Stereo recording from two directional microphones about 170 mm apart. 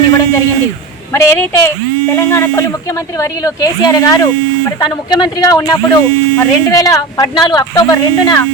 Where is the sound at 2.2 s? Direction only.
15° left (ahead or behind).